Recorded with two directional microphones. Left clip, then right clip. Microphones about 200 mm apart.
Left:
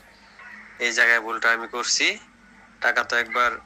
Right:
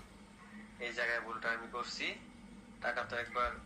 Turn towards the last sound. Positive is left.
turn(degrees=45)  # may be behind; listen again after turning